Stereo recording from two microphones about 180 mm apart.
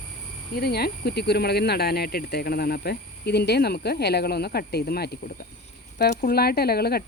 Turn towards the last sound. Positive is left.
turn(degrees=60)  # may be behind; listen again after turning